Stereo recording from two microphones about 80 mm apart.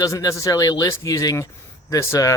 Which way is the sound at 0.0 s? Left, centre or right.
Left.